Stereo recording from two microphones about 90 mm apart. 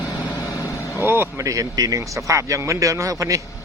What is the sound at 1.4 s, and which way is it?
Speech, 40° right (ahead or behind).